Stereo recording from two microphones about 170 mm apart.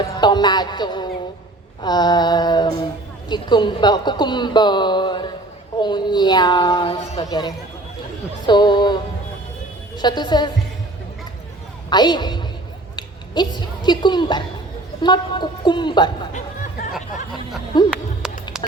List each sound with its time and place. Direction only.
0.2 s speech: 25° left (ahead or behind)
8.4 s music: 25° left (ahead or behind)
10.0 s speech: 25° left (ahead or behind)
11.9 s speech: 25° left (ahead or behind)
16.3 s a sound: 45° left (ahead or behind)
17.7 s speech: 25° left (ahead or behind)
18.2 s music: 5° right (ahead or behind)